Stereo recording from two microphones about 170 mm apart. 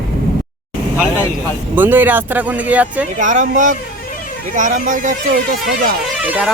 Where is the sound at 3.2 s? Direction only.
45° right (ahead or behind).